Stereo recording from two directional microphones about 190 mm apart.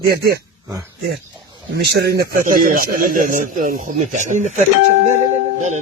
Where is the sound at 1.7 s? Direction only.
60° right (ahead or behind).